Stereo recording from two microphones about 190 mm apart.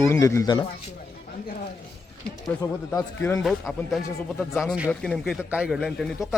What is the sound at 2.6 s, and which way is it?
Speech, 20° left (ahead or behind).